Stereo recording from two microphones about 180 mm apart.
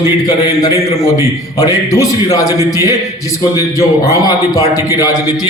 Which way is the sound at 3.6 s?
20° left (ahead or behind).